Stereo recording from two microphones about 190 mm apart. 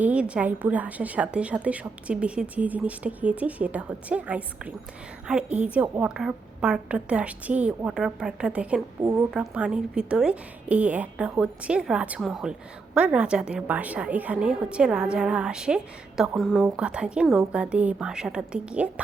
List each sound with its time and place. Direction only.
0.0 s a woman's voice: 5° right (ahead or behind)
9.0 s a woman's voice: 15° right (ahead or behind)
9.3 s a woman's voice: 5° right (ahead or behind)